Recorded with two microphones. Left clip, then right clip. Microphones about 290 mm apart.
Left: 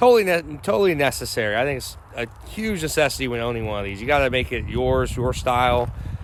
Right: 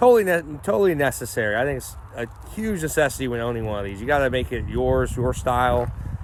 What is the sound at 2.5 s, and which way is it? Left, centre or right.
Speech, centre.